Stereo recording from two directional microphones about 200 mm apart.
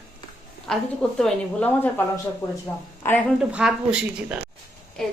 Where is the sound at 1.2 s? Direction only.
5° left (ahead or behind).